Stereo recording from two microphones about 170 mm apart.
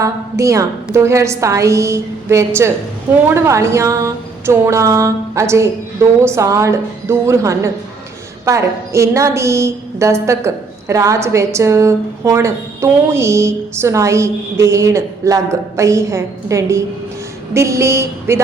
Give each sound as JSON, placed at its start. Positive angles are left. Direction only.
{"t": 0.0, "sound": "a woman's voice", "side_deg": -20}